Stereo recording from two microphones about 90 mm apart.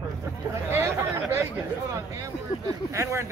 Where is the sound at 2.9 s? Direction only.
35° right (ahead or behind).